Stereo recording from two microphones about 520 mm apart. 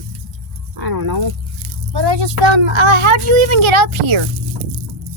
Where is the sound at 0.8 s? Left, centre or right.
Right.